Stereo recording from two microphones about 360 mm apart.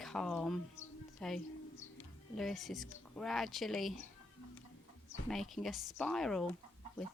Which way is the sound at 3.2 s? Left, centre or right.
Centre.